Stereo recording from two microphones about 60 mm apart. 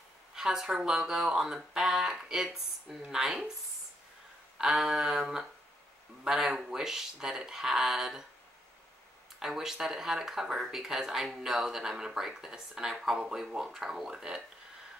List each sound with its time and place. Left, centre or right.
0.3 s speech: centre
4.6 s speech: centre
9.4 s speech: centre